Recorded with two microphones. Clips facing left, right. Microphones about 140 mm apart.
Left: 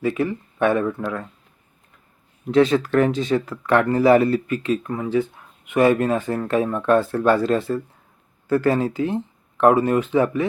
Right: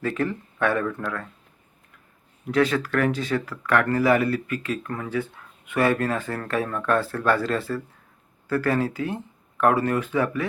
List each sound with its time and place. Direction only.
0.0 s speech: 10° left (ahead or behind)
2.5 s speech: 25° left (ahead or behind)